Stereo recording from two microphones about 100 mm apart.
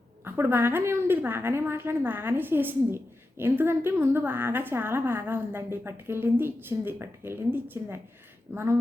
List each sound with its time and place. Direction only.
0.3 s a woman's voice: 20° right (ahead or behind)